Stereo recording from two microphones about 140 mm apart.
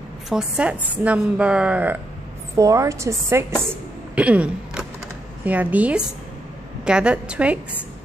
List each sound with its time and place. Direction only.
0.3 s a woman's voice: 5° right (ahead or behind)
2.5 s a woman's voice: 25° right (ahead or behind)
4.1 s a woman's voice: 10° right (ahead or behind)